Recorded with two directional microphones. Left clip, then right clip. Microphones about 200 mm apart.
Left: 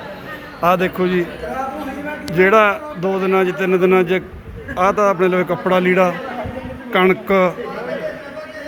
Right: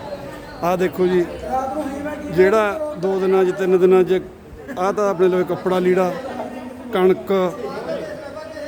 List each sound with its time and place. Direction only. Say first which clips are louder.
0.6 s a man's voice: left 3 dB; 20° right (ahead or behind)
2.3 s speech: left 3 dB; 15° right (ahead or behind)